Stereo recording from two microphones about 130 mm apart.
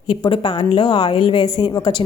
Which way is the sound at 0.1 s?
35° left (ahead or behind).